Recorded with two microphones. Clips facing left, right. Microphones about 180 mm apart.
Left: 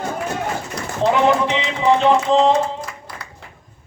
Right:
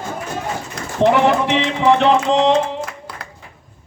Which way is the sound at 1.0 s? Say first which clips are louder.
Right 2 dB; 65° right (ahead or behind).